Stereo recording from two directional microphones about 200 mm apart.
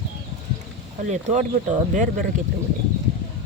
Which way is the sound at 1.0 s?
35° right (ahead or behind).